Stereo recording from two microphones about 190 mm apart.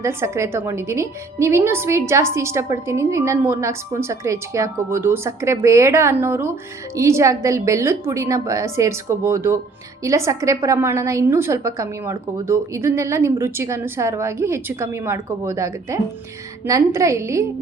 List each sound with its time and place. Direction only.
0.0 s a woman's voice: 15° right (ahead or behind)